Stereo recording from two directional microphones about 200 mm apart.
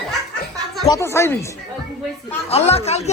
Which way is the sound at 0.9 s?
15° left (ahead or behind).